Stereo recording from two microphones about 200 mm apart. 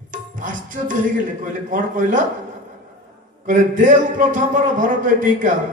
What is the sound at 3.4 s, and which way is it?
Music, 40° right (ahead or behind).